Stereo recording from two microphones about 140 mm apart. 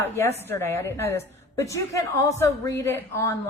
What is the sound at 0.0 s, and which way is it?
A woman's voice, 20° left (ahead or behind).